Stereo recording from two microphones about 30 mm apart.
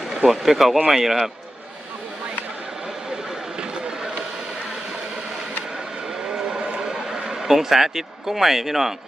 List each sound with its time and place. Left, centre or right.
0.3 s speech: centre
3.6 s run: right
6.2 s vehicle: right
6.7 s a sound: right
7.5 s speech: centre